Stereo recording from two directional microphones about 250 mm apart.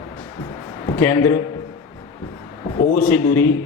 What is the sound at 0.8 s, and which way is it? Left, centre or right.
Speech, centre.